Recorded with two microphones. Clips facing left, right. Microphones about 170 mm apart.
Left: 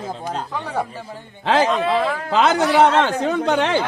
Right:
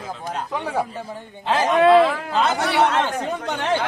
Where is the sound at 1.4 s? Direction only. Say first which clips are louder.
Even; 90° left.